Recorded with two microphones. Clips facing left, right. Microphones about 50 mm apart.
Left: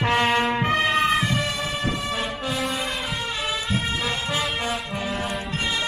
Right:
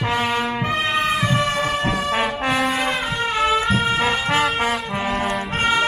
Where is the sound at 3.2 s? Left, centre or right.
Right.